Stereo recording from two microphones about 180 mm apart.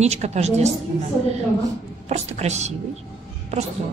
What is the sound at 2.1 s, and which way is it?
Speech, 40° right (ahead or behind).